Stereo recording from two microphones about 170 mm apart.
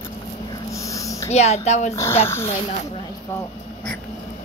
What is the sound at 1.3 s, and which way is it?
Speech, 40° left (ahead or behind).